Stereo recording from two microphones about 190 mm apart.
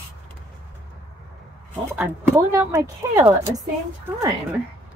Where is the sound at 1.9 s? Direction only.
10° right (ahead or behind).